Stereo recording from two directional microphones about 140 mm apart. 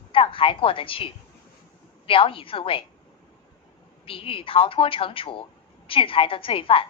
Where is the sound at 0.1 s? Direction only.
40° left (ahead or behind).